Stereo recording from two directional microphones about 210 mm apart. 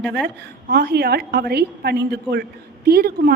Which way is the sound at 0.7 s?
50° right (ahead or behind).